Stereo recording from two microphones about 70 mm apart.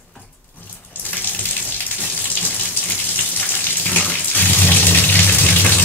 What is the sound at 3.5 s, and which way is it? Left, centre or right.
Raindrop, left.